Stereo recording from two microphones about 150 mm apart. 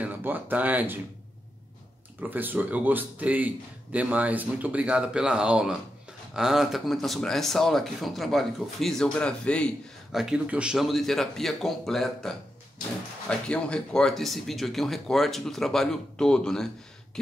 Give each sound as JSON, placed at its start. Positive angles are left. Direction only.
{"t": 0.0, "sound": "speech", "side_deg": -10}
{"t": 2.1, "sound": "speech", "side_deg": -10}
{"t": 10.1, "sound": "speech", "side_deg": -5}